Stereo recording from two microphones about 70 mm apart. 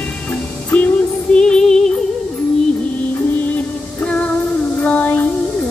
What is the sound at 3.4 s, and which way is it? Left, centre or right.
Music, left.